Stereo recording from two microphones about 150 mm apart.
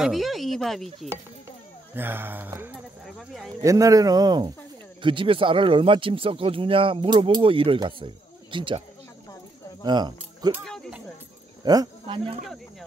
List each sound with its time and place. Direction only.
0.0 s a woman's voice: centre (ahead or behind)
2.0 s speech: 15° right (ahead or behind)
3.1 s a woman's voice: centre (ahead or behind)
3.6 s speech: 20° right (ahead or behind)
9.8 s speech: 30° right (ahead or behind)
10.6 s a sound: 5° left (ahead or behind)
11.6 s speech: 25° right (ahead or behind)